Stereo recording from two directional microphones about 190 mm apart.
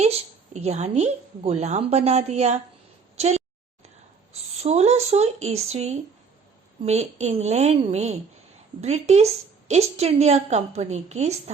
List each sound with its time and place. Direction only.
0.0 s a woman's voice: 35° right (ahead or behind)